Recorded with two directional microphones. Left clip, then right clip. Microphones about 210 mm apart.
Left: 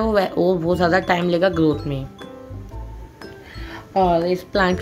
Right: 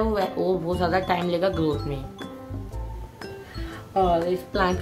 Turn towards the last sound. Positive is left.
turn(degrees=30)  # may be behind; listen again after turning